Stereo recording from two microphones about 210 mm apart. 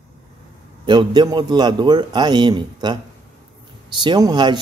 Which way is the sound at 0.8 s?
20° right (ahead or behind).